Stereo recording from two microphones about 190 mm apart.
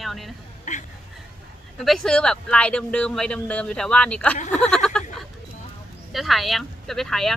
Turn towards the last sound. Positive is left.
turn(degrees=0)  # may be behind; listen again after turning